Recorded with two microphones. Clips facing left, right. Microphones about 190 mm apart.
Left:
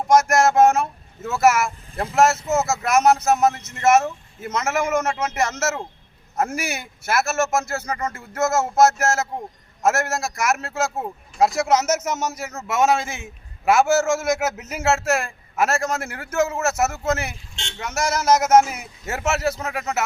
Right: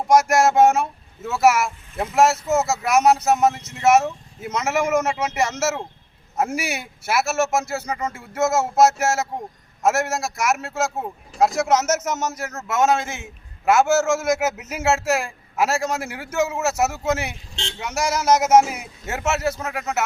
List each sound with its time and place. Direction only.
0.3 s a man's voice: centre (ahead or behind)
11.3 s a man's voice: 5° left (ahead or behind)
13.7 s a man's voice: 5° right (ahead or behind)
17.5 s a sound: 35° right (ahead or behind)
17.7 s a man's voice: 10° right (ahead or behind)
19.3 s a man's voice: 5° left (ahead or behind)
19.5 s a man's voice: 5° right (ahead or behind)